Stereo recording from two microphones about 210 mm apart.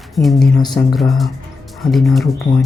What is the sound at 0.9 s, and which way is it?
Speech, centre (ahead or behind).